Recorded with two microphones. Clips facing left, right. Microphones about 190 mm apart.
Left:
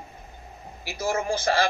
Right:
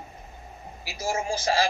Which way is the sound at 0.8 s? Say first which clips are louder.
Left 2 dB; 55° left (ahead or behind).